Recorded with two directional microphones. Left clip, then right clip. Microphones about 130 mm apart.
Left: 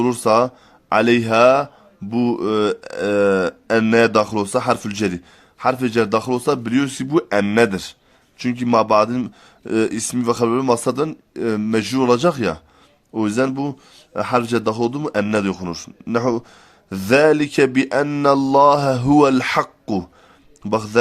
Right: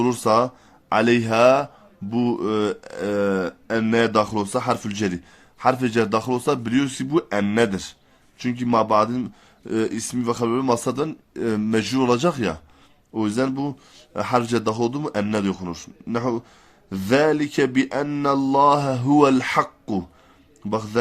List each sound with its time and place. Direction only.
0.0 s speech: 25° left (ahead or behind)